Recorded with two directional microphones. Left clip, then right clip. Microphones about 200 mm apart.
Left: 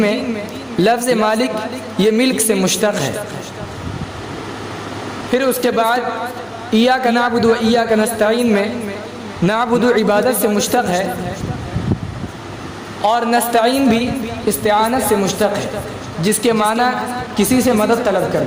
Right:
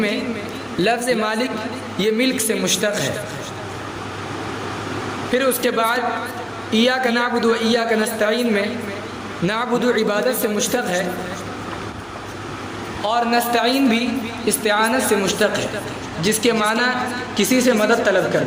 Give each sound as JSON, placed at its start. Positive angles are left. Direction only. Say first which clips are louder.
{"t": 0.8, "sound": "a woman's voice", "louder": "left 5 dB", "side_deg": 40}
{"t": 5.3, "sound": "a woman's voice", "louder": "left 3 dB", "side_deg": 40}
{"t": 13.1, "sound": "a woman's voice", "louder": "left 4 dB", "side_deg": 45}